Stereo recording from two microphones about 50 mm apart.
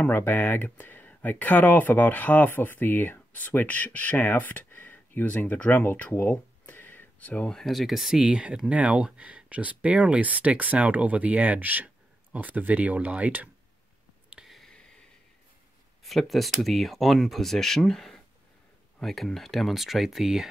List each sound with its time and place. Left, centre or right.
0.1 s speech: left
6.1 s a sound: left
7.2 s speech: left
7.6 s speech: centre
8.3 s speech: right
14.6 s a sound: centre
16.0 s speech: centre